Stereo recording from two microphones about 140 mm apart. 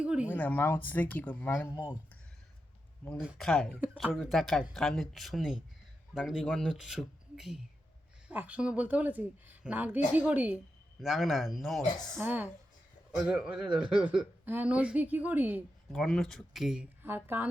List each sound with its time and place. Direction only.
0.0 s a sound: 10° right (ahead or behind)
0.3 s speech: 10° left (ahead or behind)
3.3 s speech: 5° left (ahead or behind)
12.2 s speech: 15° right (ahead or behind)
15.9 s speech: centre (ahead or behind)
17.0 s speech: 15° right (ahead or behind)